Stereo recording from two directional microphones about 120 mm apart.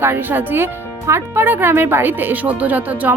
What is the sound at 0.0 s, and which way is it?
A woman's voice, 15° right (ahead or behind).